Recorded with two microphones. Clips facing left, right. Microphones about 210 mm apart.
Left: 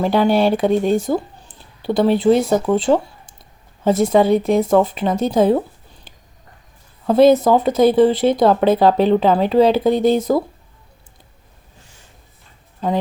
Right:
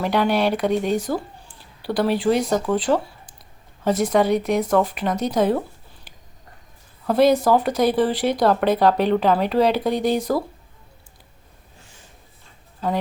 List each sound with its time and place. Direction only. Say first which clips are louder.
0.0 s speech: left 5 dB; 30° left (ahead or behind)
7.1 s speech: left 5 dB; 25° left (ahead or behind)